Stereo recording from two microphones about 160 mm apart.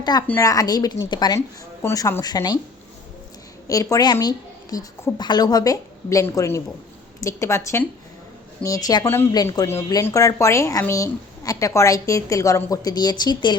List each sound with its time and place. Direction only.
0.0 s a woman's voice: 25° left (ahead or behind)
3.7 s speech: 20° left (ahead or behind)